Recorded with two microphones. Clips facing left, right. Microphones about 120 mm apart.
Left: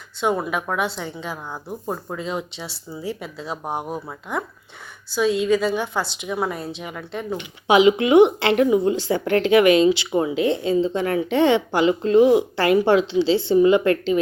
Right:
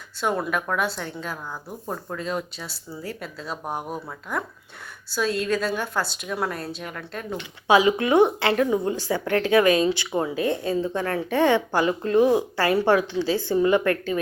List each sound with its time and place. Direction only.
0.2 s speech: 15° left (ahead or behind)
2.9 s speech: 5° left (ahead or behind)
3.2 s speech: 20° left (ahead or behind)